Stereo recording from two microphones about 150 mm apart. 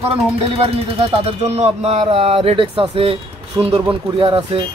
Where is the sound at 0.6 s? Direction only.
40° right (ahead or behind).